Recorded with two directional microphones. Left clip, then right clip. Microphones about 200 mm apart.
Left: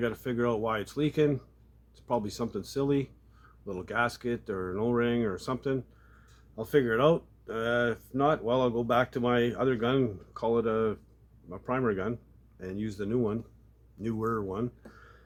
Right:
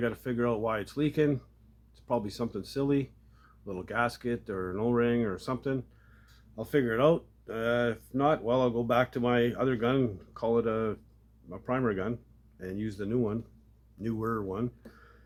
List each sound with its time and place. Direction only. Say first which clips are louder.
0.0 s speech: left 1 dB; 10° left (ahead or behind)